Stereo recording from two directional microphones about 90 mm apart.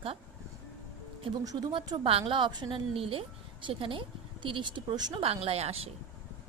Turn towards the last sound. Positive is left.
turn(degrees=-90)